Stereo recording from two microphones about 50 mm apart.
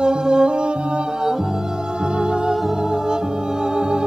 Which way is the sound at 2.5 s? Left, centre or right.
Centre.